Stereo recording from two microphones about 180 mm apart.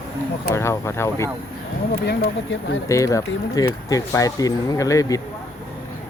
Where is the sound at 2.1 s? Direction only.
80° left.